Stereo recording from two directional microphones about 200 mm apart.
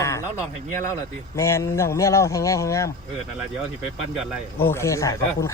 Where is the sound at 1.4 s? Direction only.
15° left (ahead or behind).